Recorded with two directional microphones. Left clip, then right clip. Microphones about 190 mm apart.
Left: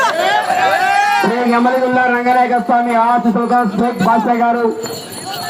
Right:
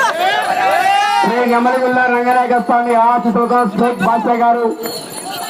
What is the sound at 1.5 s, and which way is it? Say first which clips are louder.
A man's voice: even; 25° left (ahead or behind).